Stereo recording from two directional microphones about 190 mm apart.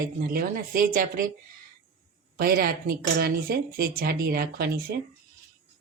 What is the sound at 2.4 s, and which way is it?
Speech, 50° right (ahead or behind).